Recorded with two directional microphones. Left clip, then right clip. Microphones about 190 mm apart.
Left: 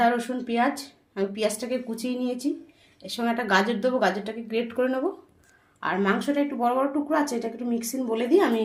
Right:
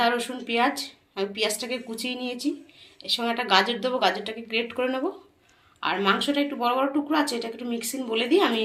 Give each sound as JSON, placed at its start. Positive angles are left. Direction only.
{"t": 0.0, "sound": "speech", "side_deg": 50}